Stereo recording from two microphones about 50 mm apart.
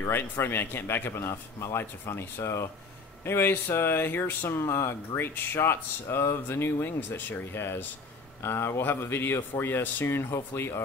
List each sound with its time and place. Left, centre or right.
0.0 s speech: left
1.3 s speech: left
3.3 s speech: left
4.5 s speech: left